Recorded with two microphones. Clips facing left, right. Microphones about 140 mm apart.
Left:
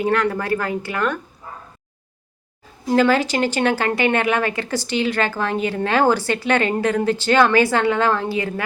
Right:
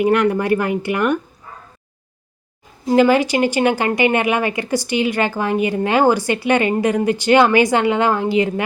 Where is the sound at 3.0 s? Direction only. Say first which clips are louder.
Right 3 dB; 15° right (ahead or behind).